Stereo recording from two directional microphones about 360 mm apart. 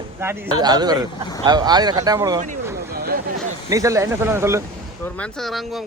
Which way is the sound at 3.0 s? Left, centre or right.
Right.